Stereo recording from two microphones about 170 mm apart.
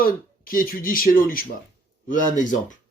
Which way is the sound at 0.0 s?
55° left (ahead or behind).